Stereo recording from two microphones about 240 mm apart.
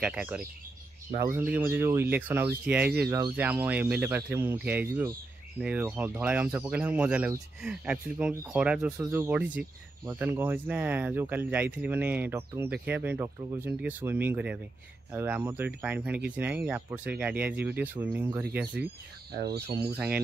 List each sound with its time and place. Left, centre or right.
0.0 s speech: centre
19.3 s speech: right
19.7 s speech: centre